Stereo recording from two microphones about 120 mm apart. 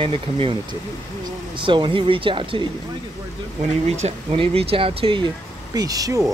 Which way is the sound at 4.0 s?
55° right (ahead or behind).